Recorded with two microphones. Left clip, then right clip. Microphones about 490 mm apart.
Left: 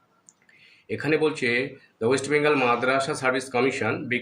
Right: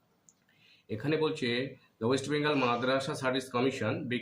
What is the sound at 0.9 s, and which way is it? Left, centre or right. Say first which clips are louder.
Speech: left 8 dB; right.